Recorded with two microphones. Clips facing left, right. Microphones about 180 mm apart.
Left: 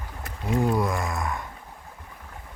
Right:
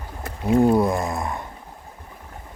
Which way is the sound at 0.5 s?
30° right (ahead or behind).